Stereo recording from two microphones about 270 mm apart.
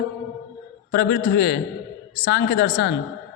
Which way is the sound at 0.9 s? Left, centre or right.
Left.